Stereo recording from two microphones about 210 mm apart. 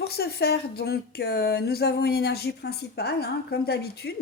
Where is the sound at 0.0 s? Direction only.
50° left (ahead or behind).